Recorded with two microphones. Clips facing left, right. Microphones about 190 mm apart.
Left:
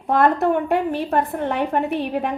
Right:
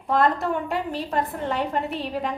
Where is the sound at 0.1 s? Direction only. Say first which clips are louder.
Left 5 dB; 60° left (ahead or behind).